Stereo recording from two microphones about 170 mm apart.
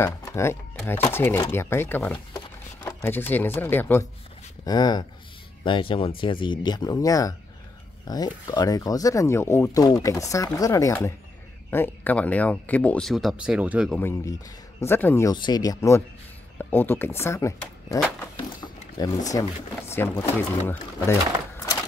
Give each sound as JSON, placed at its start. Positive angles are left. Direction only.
{"t": 0.0, "sound": "speech", "side_deg": 15}
{"t": 4.6, "sound": "speech", "side_deg": 25}
{"t": 13.8, "sound": "speech", "side_deg": 5}
{"t": 15.3, "sound": "speech", "side_deg": 25}